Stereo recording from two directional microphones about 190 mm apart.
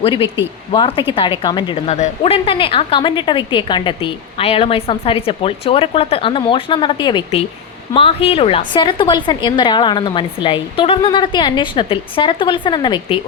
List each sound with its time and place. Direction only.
0.0 s a woman's voice: 30° left (ahead or behind)